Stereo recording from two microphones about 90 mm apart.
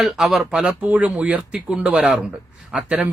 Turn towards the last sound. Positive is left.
turn(degrees=-10)  # may be behind; listen again after turning